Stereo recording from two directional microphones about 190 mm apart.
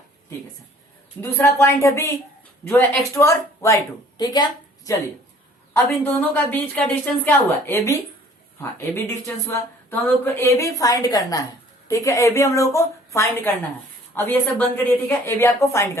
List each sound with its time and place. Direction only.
1.2 s a woman's voice: 10° left (ahead or behind)
5.7 s a woman's voice: 10° left (ahead or behind)
9.0 s a woman's voice: 15° left (ahead or behind)